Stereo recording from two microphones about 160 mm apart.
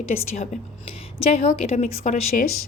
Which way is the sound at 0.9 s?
35° left (ahead or behind).